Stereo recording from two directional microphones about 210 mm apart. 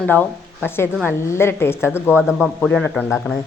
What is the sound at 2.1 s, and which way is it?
Speech, 5° right (ahead or behind).